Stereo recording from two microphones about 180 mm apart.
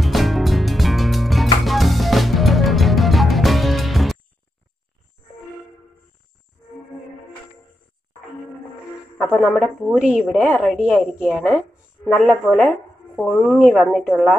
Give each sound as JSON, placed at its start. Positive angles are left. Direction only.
{"t": 0.0, "sound": "music", "side_deg": 0}
{"t": 9.8, "sound": "a woman's voice", "side_deg": -5}